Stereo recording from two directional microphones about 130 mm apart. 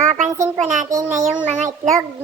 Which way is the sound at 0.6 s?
75° right (ahead or behind).